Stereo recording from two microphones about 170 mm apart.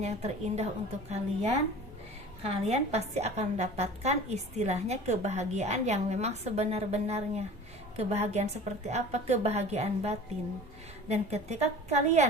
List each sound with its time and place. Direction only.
0.0 s a woman's voice: 40° right (ahead or behind)